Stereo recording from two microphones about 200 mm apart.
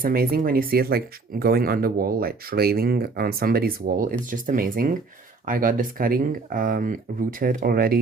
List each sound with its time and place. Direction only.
0.0 s speech: 45° right (ahead or behind)